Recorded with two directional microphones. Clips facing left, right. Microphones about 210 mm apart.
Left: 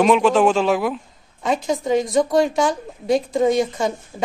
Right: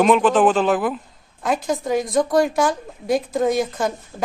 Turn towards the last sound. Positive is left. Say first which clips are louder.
# left 2 dB
turn(degrees=0)  # may be behind; listen again after turning